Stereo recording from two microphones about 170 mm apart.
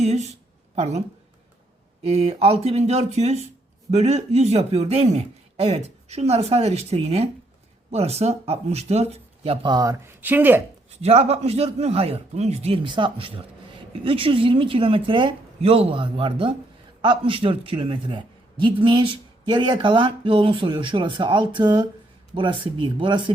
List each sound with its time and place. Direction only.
0.0 s speech: 40° right (ahead or behind)
2.0 s speech: 35° right (ahead or behind)
9.7 s speech: 20° right (ahead or behind)
11.0 s a man's voice: 40° right (ahead or behind)